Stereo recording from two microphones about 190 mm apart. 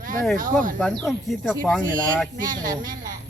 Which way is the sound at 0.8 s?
5° left (ahead or behind).